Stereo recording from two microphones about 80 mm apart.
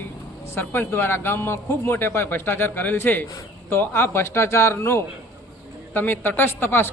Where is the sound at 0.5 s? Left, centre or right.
Left.